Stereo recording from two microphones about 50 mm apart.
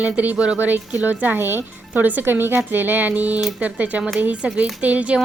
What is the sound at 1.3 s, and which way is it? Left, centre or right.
Speech, right.